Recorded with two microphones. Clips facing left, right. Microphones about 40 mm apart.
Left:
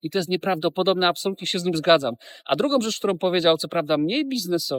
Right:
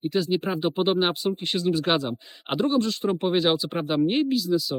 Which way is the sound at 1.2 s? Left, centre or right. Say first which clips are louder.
Even; left.